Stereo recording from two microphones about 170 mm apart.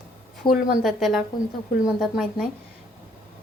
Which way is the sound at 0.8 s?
Centre (ahead or behind).